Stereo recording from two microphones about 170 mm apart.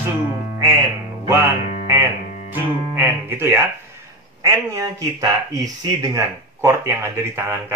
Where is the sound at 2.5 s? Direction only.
10° right (ahead or behind).